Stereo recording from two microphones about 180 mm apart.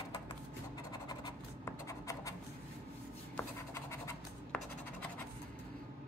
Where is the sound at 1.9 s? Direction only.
20° left (ahead or behind).